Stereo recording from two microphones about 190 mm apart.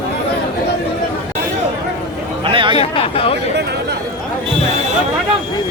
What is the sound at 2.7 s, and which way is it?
Speech, 30° left (ahead or behind).